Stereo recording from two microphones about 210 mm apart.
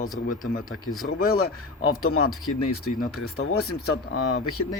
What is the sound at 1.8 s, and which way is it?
Speech, 90° left.